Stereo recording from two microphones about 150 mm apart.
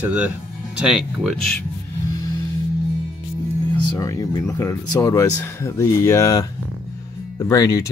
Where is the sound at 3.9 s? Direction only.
20° left (ahead or behind).